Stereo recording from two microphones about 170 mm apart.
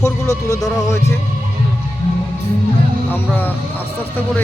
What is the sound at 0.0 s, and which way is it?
Speech, 20° left (ahead or behind).